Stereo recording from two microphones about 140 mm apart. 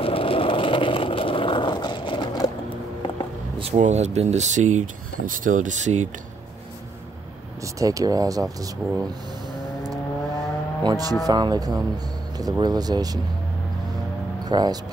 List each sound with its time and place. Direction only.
0.0 s vehicle: 40° left (ahead or behind)
3.7 s speech: 55° right (ahead or behind)
7.6 s speech: 25° right (ahead or behind)
10.8 s speech: 30° right (ahead or behind)
14.4 s speech: 30° right (ahead or behind)